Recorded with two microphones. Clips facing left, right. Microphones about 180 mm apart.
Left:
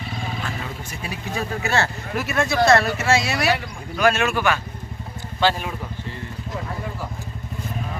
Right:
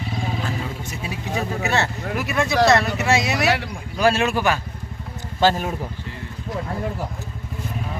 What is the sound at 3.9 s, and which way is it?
Speech, 30° right (ahead or behind).